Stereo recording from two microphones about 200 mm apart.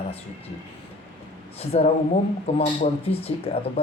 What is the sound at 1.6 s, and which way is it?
Speech, 30° left (ahead or behind).